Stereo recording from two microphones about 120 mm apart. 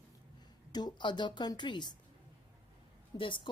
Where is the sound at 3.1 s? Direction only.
35° left (ahead or behind).